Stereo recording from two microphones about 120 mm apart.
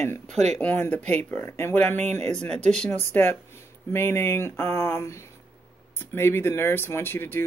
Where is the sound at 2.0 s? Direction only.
65° right (ahead or behind).